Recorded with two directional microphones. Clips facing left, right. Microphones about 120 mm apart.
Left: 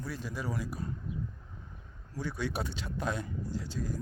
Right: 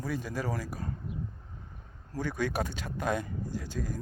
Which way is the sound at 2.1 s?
50° right (ahead or behind).